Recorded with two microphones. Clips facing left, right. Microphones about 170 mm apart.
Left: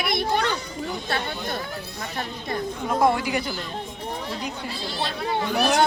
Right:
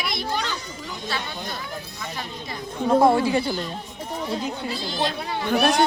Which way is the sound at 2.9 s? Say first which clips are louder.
Right 5 dB; 25° right (ahead or behind).